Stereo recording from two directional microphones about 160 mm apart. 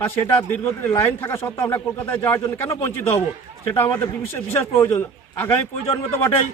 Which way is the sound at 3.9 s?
15° left (ahead or behind).